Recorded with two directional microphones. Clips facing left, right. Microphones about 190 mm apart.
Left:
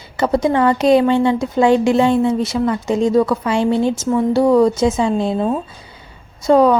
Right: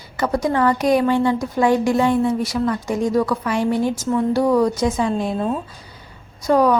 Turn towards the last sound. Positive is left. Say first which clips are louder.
# left 4 dB
turn(degrees=25)  # may be behind; listen again after turning